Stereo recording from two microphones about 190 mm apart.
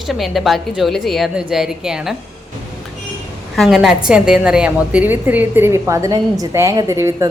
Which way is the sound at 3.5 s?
Centre (ahead or behind).